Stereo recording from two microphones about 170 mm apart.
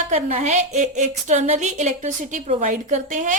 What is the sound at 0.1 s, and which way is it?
A woman's voice, 45° right (ahead or behind).